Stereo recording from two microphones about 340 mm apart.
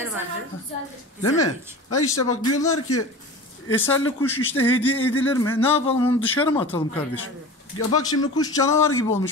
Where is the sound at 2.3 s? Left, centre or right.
Left.